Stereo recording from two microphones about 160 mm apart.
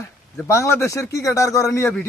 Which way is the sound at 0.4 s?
15° left (ahead or behind).